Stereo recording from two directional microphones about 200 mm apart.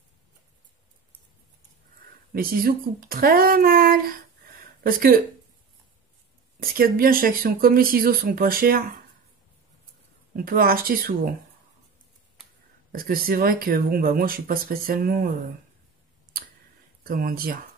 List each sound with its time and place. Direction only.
2.3 s speech: 45° right (ahead or behind)
6.6 s speech: 45° right (ahead or behind)
10.3 s speech: 45° right (ahead or behind)
12.9 s speech: 45° right (ahead or behind)
16.3 s a sound: 45° right (ahead or behind)
17.0 s speech: 45° right (ahead or behind)